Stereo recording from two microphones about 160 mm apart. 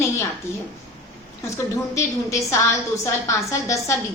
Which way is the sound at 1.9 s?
20° left (ahead or behind).